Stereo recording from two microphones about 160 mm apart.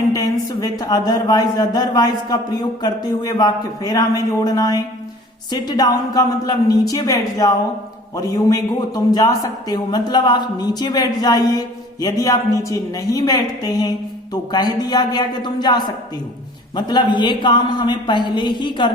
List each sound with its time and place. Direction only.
0.1 s speech: 20° left (ahead or behind)